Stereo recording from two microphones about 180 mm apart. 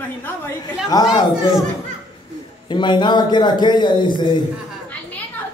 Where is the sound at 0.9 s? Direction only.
20° left (ahead or behind).